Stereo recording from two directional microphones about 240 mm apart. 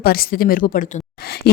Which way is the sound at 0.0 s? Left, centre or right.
Left.